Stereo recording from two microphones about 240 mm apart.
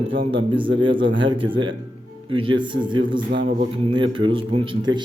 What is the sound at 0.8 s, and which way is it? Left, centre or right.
A man's voice, right.